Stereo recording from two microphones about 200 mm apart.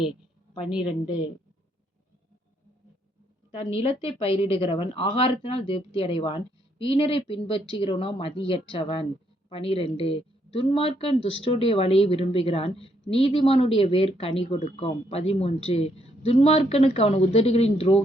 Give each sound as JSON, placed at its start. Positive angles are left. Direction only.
{"t": 0.8, "sound": "a woman's voice", "side_deg": 25}
{"t": 3.8, "sound": "a woman's voice", "side_deg": 30}